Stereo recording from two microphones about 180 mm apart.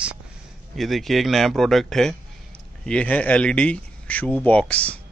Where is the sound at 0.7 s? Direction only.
Centre (ahead or behind).